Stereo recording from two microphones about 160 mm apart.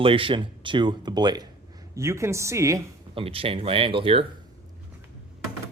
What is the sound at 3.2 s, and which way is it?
Speech, 35° right (ahead or behind).